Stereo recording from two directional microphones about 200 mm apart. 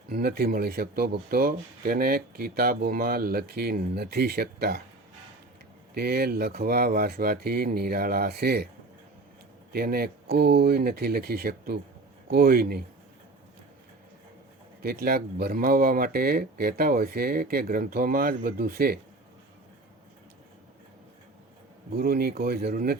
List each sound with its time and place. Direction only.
0.1 s speech: 50° right (ahead or behind)
5.9 s speech: 50° right (ahead or behind)
9.7 s speech: 50° right (ahead or behind)
14.8 s speech: 50° right (ahead or behind)
21.9 s speech: 50° right (ahead or behind)